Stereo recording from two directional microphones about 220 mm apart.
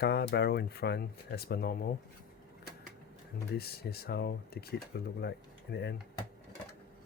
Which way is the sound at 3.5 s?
45° left (ahead or behind).